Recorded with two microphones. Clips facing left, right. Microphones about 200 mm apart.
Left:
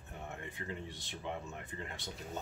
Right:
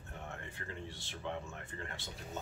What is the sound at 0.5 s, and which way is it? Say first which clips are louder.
Speech: left 2 dB; 15° left (ahead or behind).